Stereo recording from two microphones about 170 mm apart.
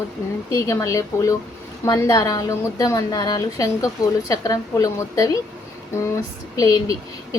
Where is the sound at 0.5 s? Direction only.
20° left (ahead or behind).